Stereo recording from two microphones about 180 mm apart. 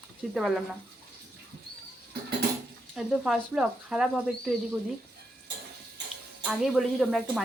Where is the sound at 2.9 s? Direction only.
Centre (ahead or behind).